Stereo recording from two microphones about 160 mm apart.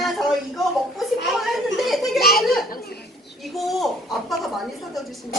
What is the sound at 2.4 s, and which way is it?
Children playing, centre (ahead or behind).